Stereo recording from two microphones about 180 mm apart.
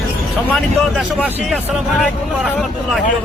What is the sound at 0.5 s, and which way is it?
Speech, centre (ahead or behind).